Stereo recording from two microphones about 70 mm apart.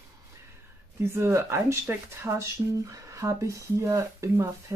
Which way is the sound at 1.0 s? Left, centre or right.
Right.